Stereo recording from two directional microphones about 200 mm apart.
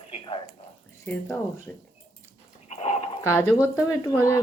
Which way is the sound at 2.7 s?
30° left (ahead or behind).